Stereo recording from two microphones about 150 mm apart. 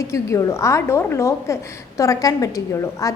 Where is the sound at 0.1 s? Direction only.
20° left (ahead or behind).